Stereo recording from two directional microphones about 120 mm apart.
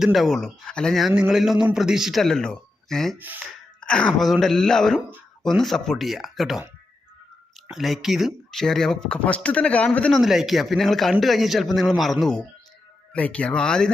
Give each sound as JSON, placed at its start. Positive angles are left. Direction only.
{"t": 0.0, "sound": "a man's voice", "side_deg": 0}
{"t": 3.2, "sound": "speech", "side_deg": -15}
{"t": 3.4, "sound": "a man's voice", "side_deg": 5}
{"t": 7.7, "sound": "a man's voice", "side_deg": 0}
{"t": 10.2, "sound": "a man's voice", "side_deg": 0}